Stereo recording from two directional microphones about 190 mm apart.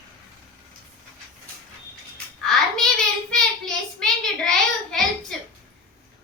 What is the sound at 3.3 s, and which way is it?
Child singing, 5° left (ahead or behind).